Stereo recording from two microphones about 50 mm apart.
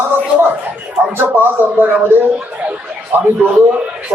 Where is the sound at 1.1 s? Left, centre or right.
Right.